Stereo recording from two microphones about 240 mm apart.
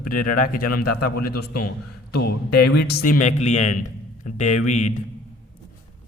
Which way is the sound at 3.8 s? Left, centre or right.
Left.